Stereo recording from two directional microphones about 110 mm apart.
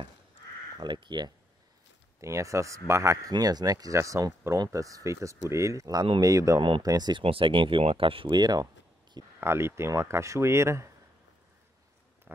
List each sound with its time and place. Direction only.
0.7 s speech: 45° right (ahead or behind)
2.2 s speech: 25° right (ahead or behind)
7.2 s speech: 55° right (ahead or behind)
9.4 s speech: 20° right (ahead or behind)